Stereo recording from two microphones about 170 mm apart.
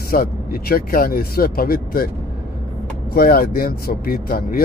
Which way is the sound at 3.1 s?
60° left (ahead or behind).